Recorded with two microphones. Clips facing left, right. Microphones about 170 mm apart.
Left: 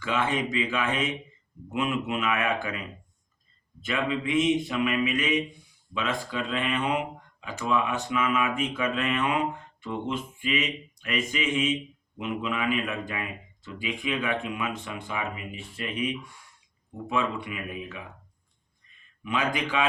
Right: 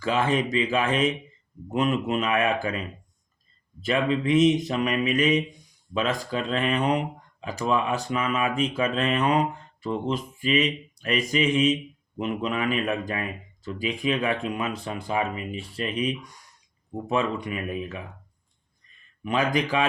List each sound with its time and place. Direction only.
0.0 s speech: 35° right (ahead or behind)
3.8 s speech: 35° right (ahead or behind)
19.2 s speech: 40° right (ahead or behind)